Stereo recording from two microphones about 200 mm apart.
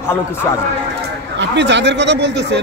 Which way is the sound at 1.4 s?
60° right (ahead or behind).